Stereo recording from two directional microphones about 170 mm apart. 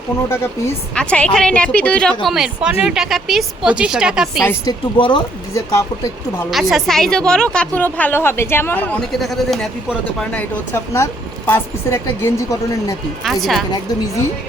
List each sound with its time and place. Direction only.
0.9 s a woman's voice: 5° left (ahead or behind)
4.9 s speech: 30° left (ahead or behind)
6.5 s a woman's voice: centre (ahead or behind)
10.9 s a woman's voice: 15° left (ahead or behind)
13.2 s a woman's voice: centre (ahead or behind)